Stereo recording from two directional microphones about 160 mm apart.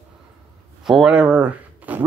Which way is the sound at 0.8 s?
Centre (ahead or behind).